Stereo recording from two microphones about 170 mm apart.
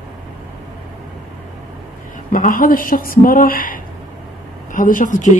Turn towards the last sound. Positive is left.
turn(degrees=45)  # may be behind; listen again after turning